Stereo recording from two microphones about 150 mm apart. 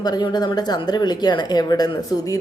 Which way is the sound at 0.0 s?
30° left (ahead or behind).